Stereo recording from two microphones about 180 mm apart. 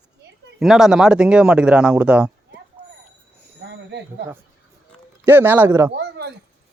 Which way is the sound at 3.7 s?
75° right (ahead or behind).